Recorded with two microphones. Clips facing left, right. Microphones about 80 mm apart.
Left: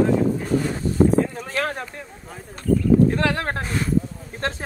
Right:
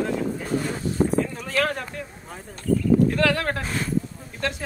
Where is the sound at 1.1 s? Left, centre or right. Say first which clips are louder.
Left 2 dB; left.